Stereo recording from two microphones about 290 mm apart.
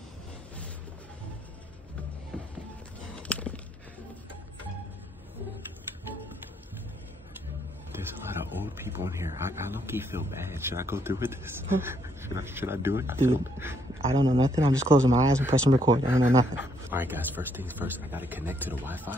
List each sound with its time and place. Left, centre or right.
2.3 s music: centre
3.2 s a sound: centre
8.8 s speech: centre